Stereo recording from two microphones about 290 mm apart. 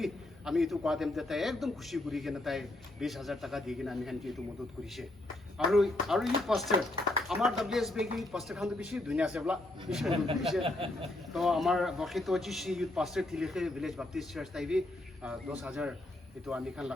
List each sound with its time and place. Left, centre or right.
0.0 s a man's voice: centre
5.5 s a man's voice: centre
10.6 s speech: centre
11.3 s a man's voice: centre